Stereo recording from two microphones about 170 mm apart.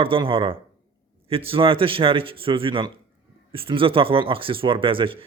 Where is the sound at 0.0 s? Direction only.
30° right (ahead or behind).